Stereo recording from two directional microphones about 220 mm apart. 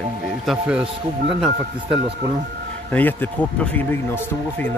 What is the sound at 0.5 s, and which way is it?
Speech, 5° right (ahead or behind).